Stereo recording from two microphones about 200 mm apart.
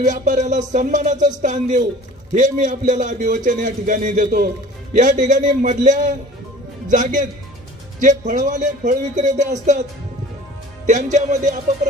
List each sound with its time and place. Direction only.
0.0 s a man's voice: 40° right (ahead or behind)
6.9 s a man's voice: 40° right (ahead or behind)
10.9 s a man's voice: 35° right (ahead or behind)